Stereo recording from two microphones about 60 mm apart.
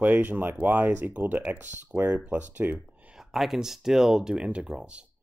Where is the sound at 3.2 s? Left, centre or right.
Centre.